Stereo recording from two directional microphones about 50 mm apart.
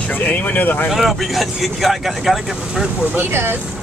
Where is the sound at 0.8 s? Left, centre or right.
Centre.